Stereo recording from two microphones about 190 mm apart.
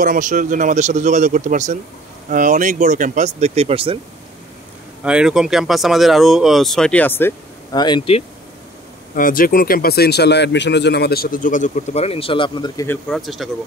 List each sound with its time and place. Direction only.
0.0 s speech: 45° right (ahead or behind); by 4.0 s 30° right (ahead or behind)
5.0 s speech: 5° right (ahead or behind); by 8.2 s 25° left (ahead or behind)
9.1 s speech: 45° left (ahead or behind); by 12.8 s 25° left (ahead or behind)
12.8 s speech: 5° left (ahead or behind)